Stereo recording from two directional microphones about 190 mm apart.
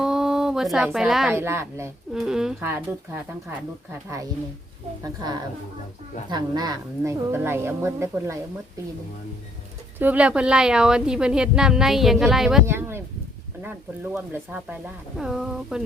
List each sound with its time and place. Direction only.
0.0 s a sound: 5° right (ahead or behind)
0.9 s a woman's voice: centre (ahead or behind)
1.3 s speech: 15° right (ahead or behind)
2.1 s a woman's voice: centre (ahead or behind)
5.0 s a woman's voice: 20° right (ahead or behind)
10.0 s a woman's voice: 5° right (ahead or behind)
12.6 s speech: 10° right (ahead or behind)